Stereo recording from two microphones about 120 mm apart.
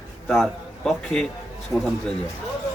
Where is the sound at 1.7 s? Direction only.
20° left (ahead or behind).